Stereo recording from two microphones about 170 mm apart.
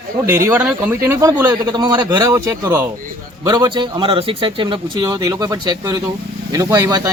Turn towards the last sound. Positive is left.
turn(degrees=-20)  # may be behind; listen again after turning